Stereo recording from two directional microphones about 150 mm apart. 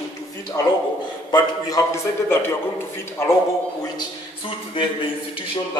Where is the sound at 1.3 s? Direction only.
20° left (ahead or behind).